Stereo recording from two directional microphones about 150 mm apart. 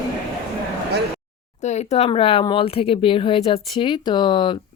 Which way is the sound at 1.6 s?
50° left (ahead or behind).